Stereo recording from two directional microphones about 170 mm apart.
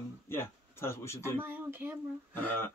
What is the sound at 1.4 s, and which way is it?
Speech, 10° right (ahead or behind).